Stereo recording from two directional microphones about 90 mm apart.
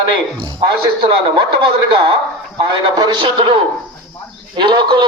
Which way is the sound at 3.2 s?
65° right (ahead or behind).